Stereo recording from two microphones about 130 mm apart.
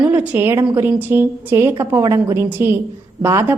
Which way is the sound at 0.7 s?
15° right (ahead or behind).